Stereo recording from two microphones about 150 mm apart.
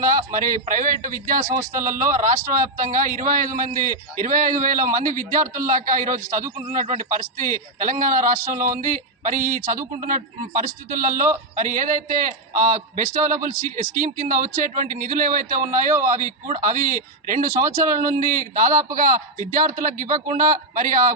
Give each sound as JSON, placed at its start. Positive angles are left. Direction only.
{"t": 0.0, "sound": "a man's voice", "side_deg": -60}
{"t": 1.4, "sound": "a man's voice", "side_deg": -15}
{"t": 1.7, "sound": "a man's voice", "side_deg": -60}